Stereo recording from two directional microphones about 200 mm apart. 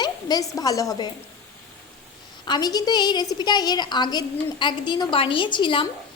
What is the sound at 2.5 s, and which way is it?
A woman's voice, 20° left (ahead or behind).